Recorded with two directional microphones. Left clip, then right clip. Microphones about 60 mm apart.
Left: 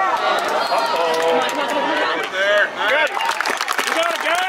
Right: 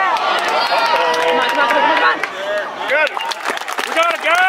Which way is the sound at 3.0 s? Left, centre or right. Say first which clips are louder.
Right 1 dB; centre.